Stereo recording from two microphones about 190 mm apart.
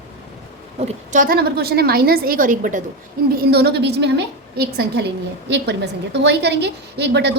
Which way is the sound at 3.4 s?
60° right (ahead or behind).